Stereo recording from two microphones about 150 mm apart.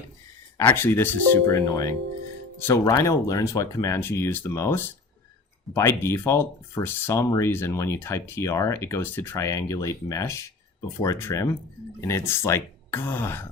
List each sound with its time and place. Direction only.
0.6 s speech: 10° left (ahead or behind)